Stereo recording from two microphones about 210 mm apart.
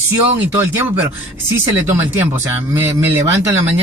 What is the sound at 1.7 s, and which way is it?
Speech, 10° right (ahead or behind).